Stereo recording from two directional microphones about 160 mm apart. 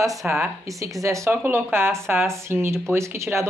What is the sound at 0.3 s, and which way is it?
Speech, 15° right (ahead or behind).